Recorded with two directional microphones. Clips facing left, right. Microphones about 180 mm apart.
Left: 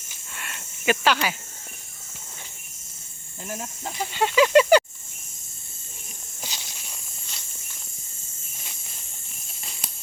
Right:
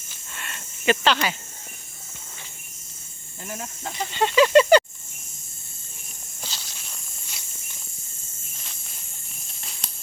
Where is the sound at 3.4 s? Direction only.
10° left (ahead or behind).